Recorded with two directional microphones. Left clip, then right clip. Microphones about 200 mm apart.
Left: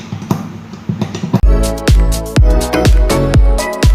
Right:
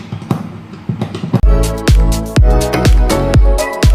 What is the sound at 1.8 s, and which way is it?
Music, centre (ahead or behind).